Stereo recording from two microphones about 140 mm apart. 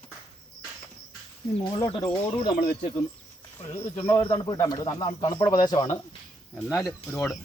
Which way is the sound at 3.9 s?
15° left (ahead or behind).